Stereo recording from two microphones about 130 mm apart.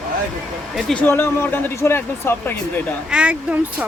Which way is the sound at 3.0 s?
10° right (ahead or behind).